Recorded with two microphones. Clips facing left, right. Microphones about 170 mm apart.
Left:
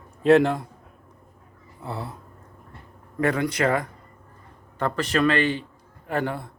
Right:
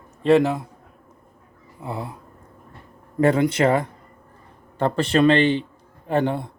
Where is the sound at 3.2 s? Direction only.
25° right (ahead or behind).